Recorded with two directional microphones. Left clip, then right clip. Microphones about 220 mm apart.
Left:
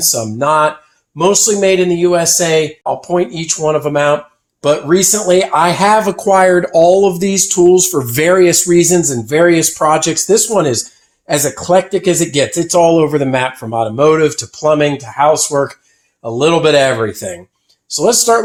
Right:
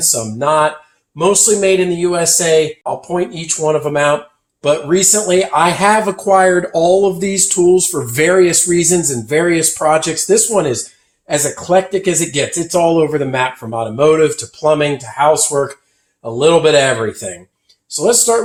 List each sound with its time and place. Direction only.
0.0 s speech: 40° left (ahead or behind)